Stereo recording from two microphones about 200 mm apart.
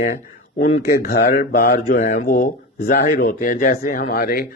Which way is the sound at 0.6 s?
50° left (ahead or behind).